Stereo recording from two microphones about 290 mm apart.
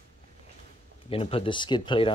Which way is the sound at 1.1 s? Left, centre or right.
Centre.